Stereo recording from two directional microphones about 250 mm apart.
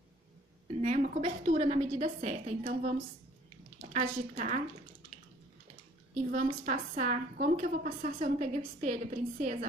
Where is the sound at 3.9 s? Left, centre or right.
Right.